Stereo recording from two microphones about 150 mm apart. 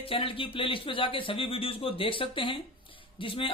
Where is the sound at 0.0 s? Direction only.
35° left (ahead or behind).